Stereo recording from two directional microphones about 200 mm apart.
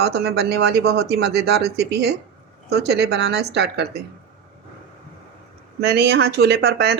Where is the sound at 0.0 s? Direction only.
55° right (ahead or behind).